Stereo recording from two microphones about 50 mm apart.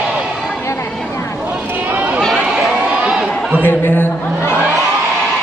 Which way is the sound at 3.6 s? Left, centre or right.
Left.